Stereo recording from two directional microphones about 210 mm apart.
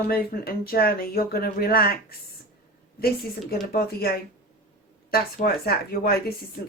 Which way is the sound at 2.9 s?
45° left (ahead or behind).